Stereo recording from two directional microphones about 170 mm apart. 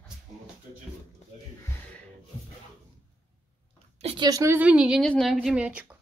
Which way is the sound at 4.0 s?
35° right (ahead or behind).